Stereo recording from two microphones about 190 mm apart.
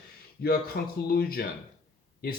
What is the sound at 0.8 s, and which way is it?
Speech, 55° left (ahead or behind).